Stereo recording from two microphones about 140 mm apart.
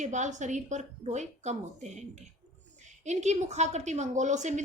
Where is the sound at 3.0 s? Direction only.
55° right (ahead or behind).